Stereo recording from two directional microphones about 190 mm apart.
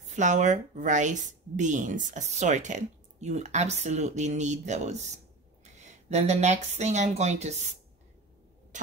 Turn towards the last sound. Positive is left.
turn(degrees=-35)  # may be behind; listen again after turning